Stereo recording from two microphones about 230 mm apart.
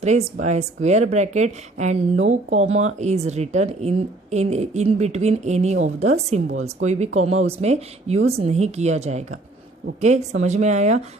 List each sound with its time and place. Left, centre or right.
0.0 s speech: right